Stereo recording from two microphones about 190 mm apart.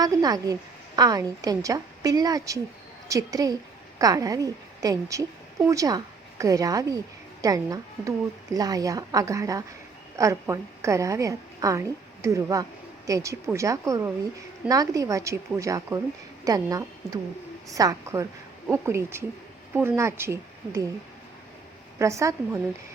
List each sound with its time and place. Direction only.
0.0 s a woman's voice: 20° right (ahead or behind)
21.9 s speech: 15° right (ahead or behind)